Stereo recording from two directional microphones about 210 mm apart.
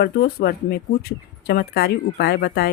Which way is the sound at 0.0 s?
50° left (ahead or behind).